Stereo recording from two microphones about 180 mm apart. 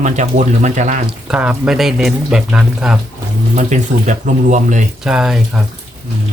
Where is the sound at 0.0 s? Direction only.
40° right (ahead or behind).